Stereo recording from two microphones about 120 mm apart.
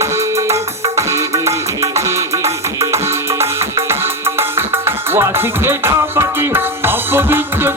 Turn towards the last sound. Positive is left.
turn(degrees=-20)  # may be behind; listen again after turning